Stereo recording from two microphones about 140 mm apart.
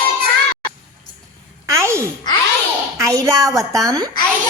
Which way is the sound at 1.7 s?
20° right (ahead or behind).